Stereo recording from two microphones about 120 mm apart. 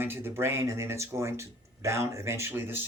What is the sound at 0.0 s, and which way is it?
Speech, 20° right (ahead or behind).